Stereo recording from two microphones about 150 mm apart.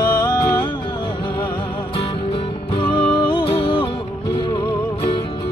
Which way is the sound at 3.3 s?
35° left (ahead or behind).